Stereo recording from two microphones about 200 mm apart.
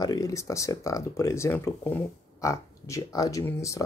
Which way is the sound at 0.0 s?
15° left (ahead or behind).